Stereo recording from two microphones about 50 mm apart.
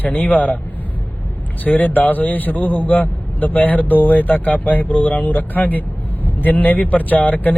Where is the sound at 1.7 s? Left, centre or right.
Left.